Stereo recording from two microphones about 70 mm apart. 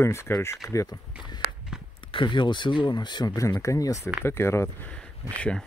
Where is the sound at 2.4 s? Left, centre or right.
Left.